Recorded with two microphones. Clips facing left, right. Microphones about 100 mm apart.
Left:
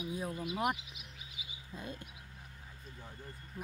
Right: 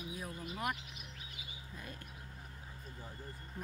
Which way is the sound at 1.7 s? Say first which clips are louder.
Left 6 dB; 25° left (ahead or behind).